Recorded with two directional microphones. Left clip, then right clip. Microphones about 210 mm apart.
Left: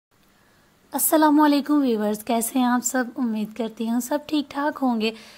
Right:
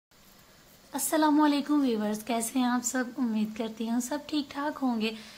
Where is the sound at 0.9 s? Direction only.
40° left (ahead or behind).